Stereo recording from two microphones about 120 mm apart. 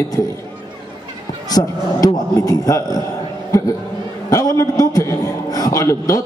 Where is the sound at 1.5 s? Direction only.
30° left (ahead or behind).